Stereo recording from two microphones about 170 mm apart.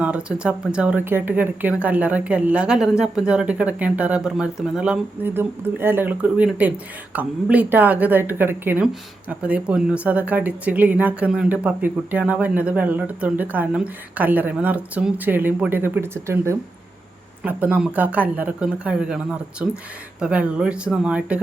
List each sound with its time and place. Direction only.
0.0 s speech: 5° right (ahead or behind)